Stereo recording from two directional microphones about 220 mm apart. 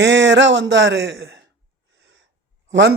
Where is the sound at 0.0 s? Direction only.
55° right (ahead or behind).